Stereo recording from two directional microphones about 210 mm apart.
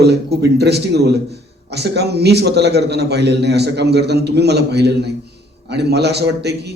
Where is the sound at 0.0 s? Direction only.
50° right (ahead or behind).